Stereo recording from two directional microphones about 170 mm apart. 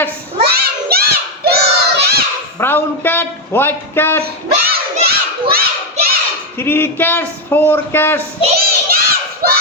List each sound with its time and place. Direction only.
0.4 s a sound: 65° right (ahead or behind)
1.6 s children playing: 65° right (ahead or behind)
2.6 s a sound: 10° left (ahead or behind)
4.2 s crowd: 65° right (ahead or behind)
6.6 s speech: 15° left (ahead or behind)
8.5 s crowd: 60° right (ahead or behind)